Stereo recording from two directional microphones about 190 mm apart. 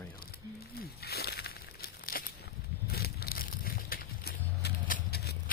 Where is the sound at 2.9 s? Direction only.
55° left (ahead or behind).